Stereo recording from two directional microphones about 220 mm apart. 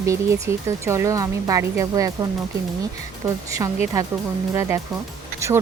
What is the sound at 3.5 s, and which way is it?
Speech, 15° right (ahead or behind).